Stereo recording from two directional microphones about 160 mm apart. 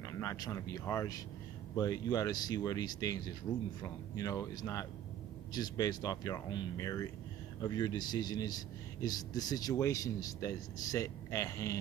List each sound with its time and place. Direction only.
0.2 s a man's voice: 20° left (ahead or behind)